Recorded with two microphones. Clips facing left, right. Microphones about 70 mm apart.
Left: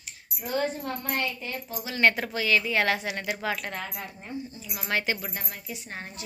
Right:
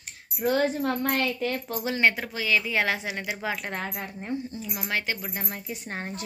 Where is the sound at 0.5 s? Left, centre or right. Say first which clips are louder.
Right 5 dB; right.